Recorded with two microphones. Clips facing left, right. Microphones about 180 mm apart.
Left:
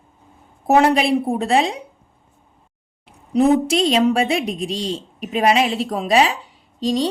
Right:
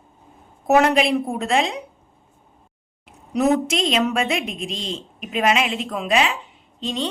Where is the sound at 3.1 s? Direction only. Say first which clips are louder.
Left 4 dB; 30° left (ahead or behind).